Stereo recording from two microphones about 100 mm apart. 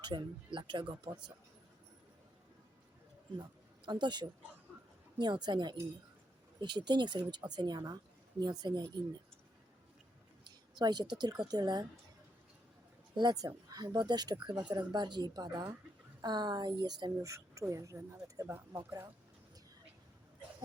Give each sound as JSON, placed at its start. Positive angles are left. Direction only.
{"t": 0.0, "sound": "speech", "side_deg": -50}
{"t": 3.8, "sound": "speech", "side_deg": -50}
{"t": 10.8, "sound": "speech", "side_deg": -45}
{"t": 13.1, "sound": "speech", "side_deg": -40}
{"t": 17.2, "sound": "speech", "side_deg": -30}